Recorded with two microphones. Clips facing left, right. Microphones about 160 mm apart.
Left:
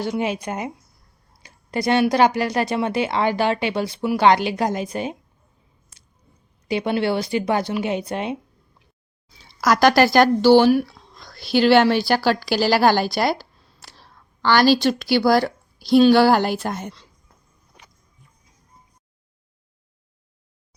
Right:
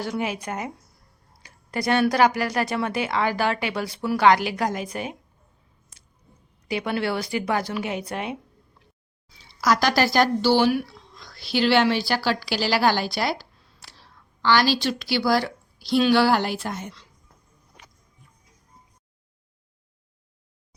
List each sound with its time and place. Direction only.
0.0 s speech: 25° left (ahead or behind)
6.7 s speech: 25° left (ahead or behind)
9.4 s speech: 55° left (ahead or behind)